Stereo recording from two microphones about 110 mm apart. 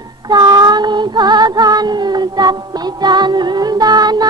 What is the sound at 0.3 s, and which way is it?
Female singing, 40° right (ahead or behind).